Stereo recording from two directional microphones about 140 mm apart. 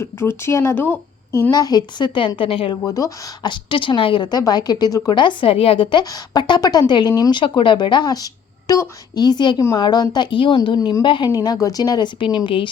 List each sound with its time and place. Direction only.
0.0 s a woman's voice: 15° left (ahead or behind); by 2.7 s 40° left (ahead or behind)
2.8 s a woman's voice: 25° left (ahead or behind)
11.3 s a woman's voice: 25° left (ahead or behind)